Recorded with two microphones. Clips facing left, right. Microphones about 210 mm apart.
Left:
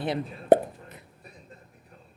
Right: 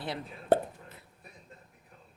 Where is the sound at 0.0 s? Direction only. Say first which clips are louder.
Left 8 dB; 20° left (ahead or behind).